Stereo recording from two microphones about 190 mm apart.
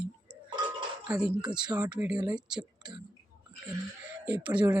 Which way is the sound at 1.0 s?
10° right (ahead or behind).